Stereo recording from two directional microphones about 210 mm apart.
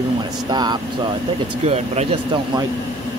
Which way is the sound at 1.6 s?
30° right (ahead or behind).